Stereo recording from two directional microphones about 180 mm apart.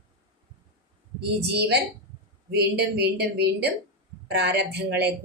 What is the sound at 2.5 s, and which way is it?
A woman's voice, 65° right (ahead or behind).